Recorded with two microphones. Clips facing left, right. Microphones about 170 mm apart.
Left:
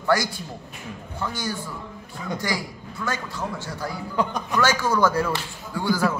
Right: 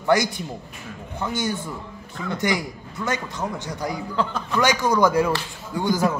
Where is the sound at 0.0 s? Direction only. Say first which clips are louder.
Right 3 dB; 20° right (ahead or behind).